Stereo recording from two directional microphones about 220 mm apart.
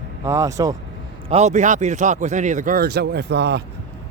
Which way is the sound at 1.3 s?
30° right (ahead or behind).